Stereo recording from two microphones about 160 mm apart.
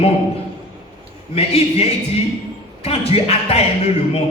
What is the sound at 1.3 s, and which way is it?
Speech, 40° left (ahead or behind).